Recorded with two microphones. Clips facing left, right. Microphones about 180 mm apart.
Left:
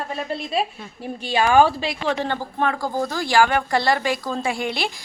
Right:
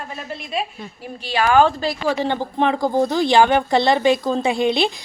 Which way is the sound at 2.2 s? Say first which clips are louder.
Right 4 dB; 20° right (ahead or behind).